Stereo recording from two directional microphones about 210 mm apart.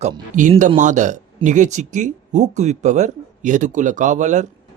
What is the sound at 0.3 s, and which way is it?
Speech, 35° right (ahead or behind).